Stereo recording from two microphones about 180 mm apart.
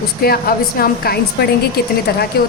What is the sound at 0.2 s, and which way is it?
A woman's voice, 55° left (ahead or behind).